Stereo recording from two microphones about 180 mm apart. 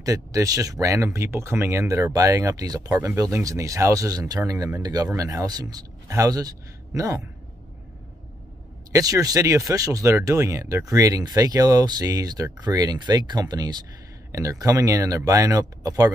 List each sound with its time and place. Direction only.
0.0 s speech: 20° right (ahead or behind)
8.9 s speech: 20° right (ahead or behind)